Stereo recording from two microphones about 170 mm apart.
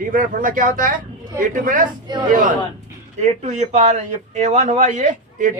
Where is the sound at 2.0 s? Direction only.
25° right (ahead or behind).